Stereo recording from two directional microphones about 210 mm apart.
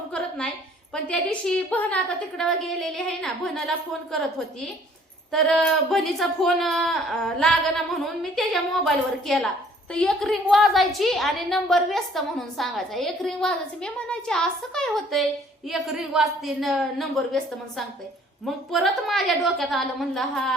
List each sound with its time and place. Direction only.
0.1 s a sound: 5° left (ahead or behind)
1.0 s a woman's voice: 5° left (ahead or behind)
5.3 s a woman's voice: centre (ahead or behind)